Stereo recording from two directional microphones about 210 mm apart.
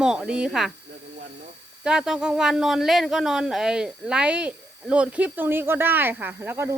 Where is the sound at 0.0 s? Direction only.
5° right (ahead or behind).